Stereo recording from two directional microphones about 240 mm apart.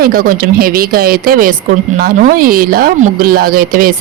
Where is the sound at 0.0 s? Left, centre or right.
Right.